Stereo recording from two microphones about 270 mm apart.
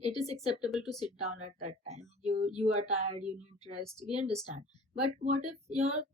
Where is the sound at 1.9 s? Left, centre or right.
Right.